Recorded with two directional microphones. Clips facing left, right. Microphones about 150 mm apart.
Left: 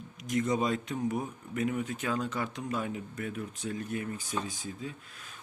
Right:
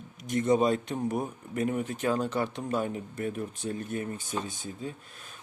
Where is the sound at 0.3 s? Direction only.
30° right (ahead or behind).